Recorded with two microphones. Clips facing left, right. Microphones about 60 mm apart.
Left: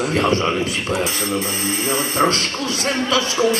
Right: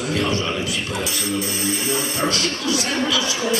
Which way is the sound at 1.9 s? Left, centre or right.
Left.